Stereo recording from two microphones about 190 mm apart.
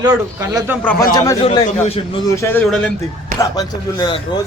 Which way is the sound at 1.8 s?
30° left (ahead or behind).